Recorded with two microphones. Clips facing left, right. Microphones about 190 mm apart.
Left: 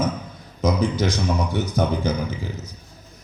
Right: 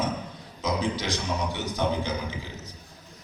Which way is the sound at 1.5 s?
45° left (ahead or behind).